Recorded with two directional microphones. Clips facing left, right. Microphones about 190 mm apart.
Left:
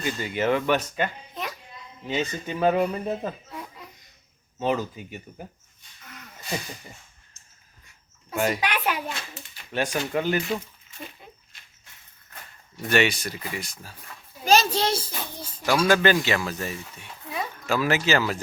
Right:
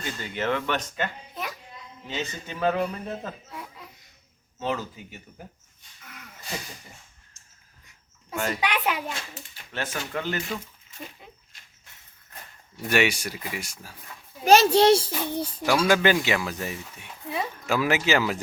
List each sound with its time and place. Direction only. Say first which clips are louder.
0.0 s a man's voice: left 4 dB; 10° left (ahead or behind)
3.5 s a sound: left 2 dB; 5° right (ahead or behind)
4.5 s a man's voice: left 4 dB; 15° left (ahead or behind)
8.3 s a woman's voice: left 4 dB; 10° left (ahead or behind)
8.6 s speech: even; 20° right (ahead or behind)
9.7 s a man's voice: left 6 dB; 15° left (ahead or behind)
12.9 s speech: left 1 dB; 10° right (ahead or behind)
14.4 s a child's voice: right 5 dB; 65° right (ahead or behind)
15.9 s speech: left 2 dB; 10° right (ahead or behind)